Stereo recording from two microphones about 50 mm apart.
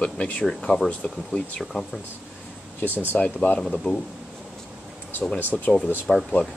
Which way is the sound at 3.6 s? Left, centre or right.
Centre.